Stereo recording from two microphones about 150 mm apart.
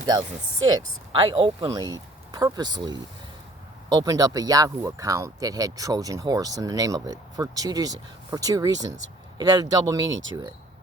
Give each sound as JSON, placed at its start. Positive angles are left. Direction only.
{"t": 0.0, "sound": "speech", "side_deg": -30}